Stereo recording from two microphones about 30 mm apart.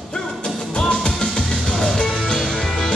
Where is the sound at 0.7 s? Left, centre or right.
Left.